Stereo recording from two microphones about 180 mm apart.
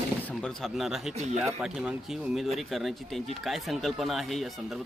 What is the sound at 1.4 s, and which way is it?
Speech, 5° right (ahead or behind).